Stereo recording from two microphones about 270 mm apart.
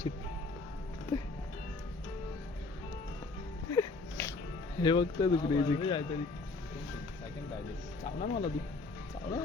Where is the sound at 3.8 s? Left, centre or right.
Centre.